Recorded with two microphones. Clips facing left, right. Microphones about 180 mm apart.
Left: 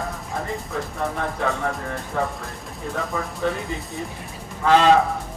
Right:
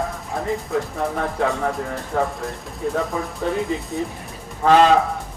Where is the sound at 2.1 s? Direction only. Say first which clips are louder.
Right 3 dB; 35° right (ahead or behind).